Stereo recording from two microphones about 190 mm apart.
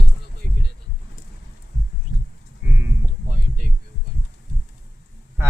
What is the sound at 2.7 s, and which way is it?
Sheep, 10° right (ahead or behind).